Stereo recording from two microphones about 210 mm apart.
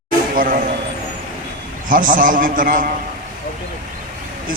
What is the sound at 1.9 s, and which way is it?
A man's voice, 40° right (ahead or behind).